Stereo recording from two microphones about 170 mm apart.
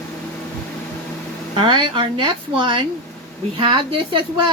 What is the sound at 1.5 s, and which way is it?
A woman's voice, 30° right (ahead or behind).